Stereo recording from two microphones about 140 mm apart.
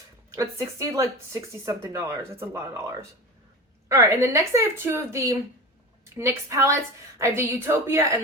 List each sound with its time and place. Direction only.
0.3 s speech: 25° right (ahead or behind)